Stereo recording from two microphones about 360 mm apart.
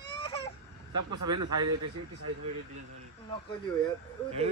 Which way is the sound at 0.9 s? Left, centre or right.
Right.